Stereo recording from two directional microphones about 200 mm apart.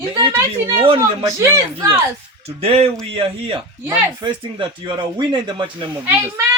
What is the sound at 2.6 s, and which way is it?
Speech, 30° right (ahead or behind).